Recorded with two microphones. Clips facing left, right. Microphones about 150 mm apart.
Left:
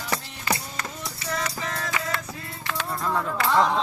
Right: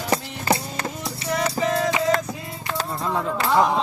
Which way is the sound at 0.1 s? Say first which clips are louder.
Right 6 dB; 25° right (ahead or behind).